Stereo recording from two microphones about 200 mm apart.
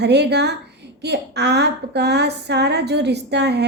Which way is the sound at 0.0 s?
55° right (ahead or behind).